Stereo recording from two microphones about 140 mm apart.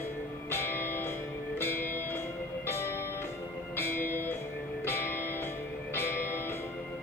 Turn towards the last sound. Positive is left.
turn(degrees=15)  # may be behind; listen again after turning